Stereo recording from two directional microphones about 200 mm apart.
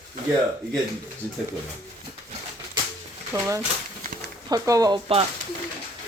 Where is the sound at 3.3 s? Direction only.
15° right (ahead or behind).